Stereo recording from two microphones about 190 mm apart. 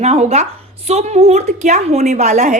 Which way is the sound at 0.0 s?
35° right (ahead or behind).